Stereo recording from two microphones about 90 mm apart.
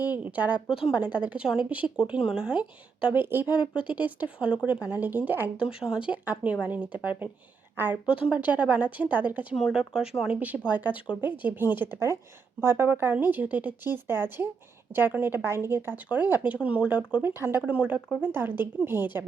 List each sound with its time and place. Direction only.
0.0 s a woman's voice: 15° right (ahead or behind)
3.1 s a woman's voice: 25° right (ahead or behind)
5.7 s a woman's voice: 10° right (ahead or behind)
9.6 s a woman's voice: 5° right (ahead or behind)
17.3 s a woman's voice: 25° right (ahead or behind)